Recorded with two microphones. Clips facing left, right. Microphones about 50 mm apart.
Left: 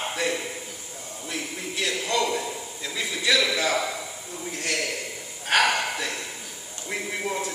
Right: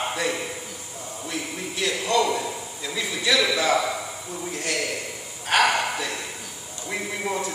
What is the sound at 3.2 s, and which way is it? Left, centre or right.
Speech, right.